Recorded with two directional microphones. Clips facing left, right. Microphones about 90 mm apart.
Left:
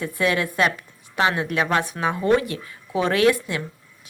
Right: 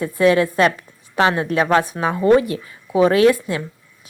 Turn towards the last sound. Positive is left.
turn(degrees=-25)  # may be behind; listen again after turning